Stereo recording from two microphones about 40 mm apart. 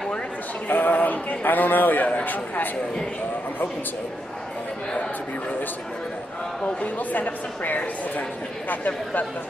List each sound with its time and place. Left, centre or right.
0.7 s speech: left
6.6 s speech: left